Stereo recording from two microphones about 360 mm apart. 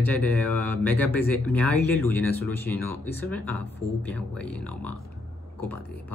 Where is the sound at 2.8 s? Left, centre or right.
Left.